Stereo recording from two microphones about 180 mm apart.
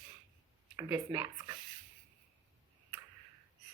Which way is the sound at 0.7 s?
20° right (ahead or behind).